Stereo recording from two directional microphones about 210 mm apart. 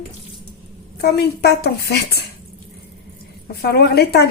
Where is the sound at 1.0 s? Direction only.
50° left (ahead or behind).